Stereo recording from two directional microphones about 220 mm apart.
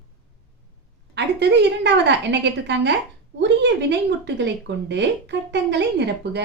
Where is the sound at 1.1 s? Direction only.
50° right (ahead or behind).